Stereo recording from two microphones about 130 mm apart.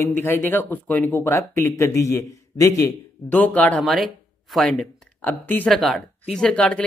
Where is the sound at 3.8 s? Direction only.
Centre (ahead or behind).